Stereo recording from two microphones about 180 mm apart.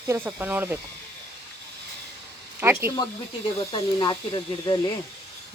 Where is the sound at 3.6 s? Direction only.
25° left (ahead or behind).